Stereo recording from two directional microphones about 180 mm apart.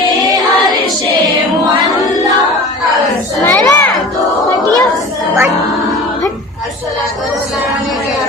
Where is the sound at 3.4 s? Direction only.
15° left (ahead or behind).